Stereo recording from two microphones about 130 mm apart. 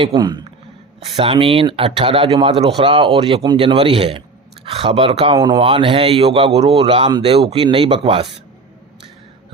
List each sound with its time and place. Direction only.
0.0 s a man's voice: 35° right (ahead or behind)
1.0 s a man's voice: 45° right (ahead or behind)